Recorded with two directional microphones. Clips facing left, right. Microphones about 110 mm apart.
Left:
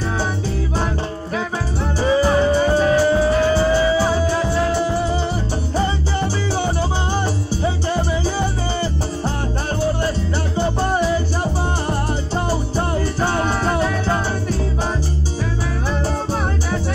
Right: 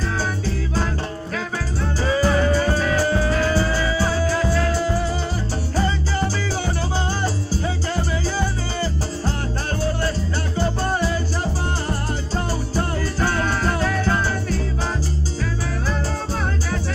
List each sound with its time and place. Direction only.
1.3 s music: 20° left (ahead or behind)
5.9 s salsa music: 20° left (ahead or behind)
7.9 s music: 20° left (ahead or behind)